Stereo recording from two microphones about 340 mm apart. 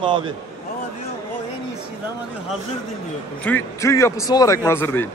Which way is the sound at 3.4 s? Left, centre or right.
Centre.